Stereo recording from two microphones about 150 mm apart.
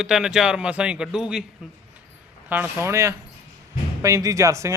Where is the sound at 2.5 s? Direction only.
15° right (ahead or behind).